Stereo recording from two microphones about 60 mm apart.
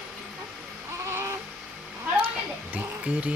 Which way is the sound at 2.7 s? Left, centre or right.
Right.